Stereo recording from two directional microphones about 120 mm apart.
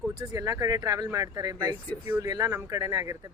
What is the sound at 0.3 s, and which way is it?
Speech, 30° right (ahead or behind).